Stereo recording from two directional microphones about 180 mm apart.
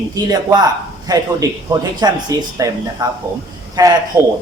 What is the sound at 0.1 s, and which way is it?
Speech, 20° right (ahead or behind).